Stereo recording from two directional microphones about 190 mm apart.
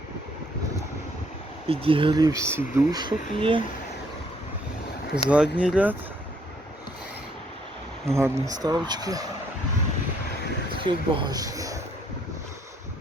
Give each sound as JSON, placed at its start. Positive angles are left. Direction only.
{"t": 1.6, "sound": "speech", "side_deg": -30}
{"t": 3.0, "sound": "speech", "side_deg": -25}
{"t": 5.1, "sound": "speech", "side_deg": -5}
{"t": 8.0, "sound": "speech", "side_deg": -15}
{"t": 10.8, "sound": "speech", "side_deg": -25}